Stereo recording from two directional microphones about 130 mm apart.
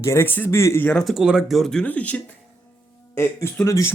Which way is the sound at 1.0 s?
5° right (ahead or behind).